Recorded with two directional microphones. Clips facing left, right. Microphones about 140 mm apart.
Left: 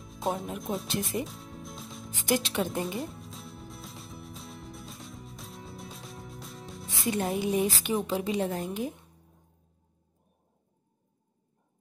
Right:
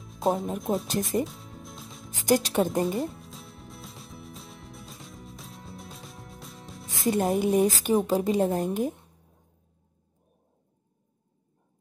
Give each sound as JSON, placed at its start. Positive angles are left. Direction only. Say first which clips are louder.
{"t": 0.0, "sound": "music", "louder": "right 5 dB", "side_deg": 0}
{"t": 0.8, "sound": "speech", "louder": "right 3 dB", "side_deg": -45}
{"t": 1.1, "sound": "music", "louder": "right 5 dB", "side_deg": 0}
{"t": 2.1, "sound": "speech", "louder": "right 5 dB", "side_deg": -40}
{"t": 2.8, "sound": "music", "louder": "right 6 dB", "side_deg": 0}
{"t": 6.9, "sound": "music", "louder": "right 5 dB", "side_deg": -45}
{"t": 7.2, "sound": "speech", "louder": "right 5 dB", "side_deg": -50}